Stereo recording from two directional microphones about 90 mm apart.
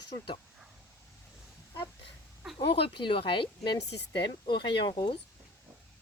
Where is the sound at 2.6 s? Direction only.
80° left; by 5.2 s 60° left (ahead or behind).